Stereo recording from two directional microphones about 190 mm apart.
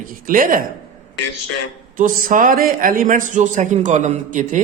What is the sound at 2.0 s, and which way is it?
A man's voice, 45° right (ahead or behind).